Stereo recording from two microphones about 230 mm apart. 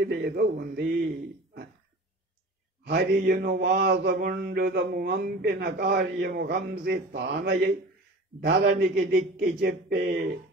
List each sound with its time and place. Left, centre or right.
0.0 s mantra: right
2.9 s mantra: right